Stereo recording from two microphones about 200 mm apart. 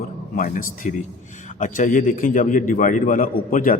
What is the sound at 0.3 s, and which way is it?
A man's voice, 40° left (ahead or behind).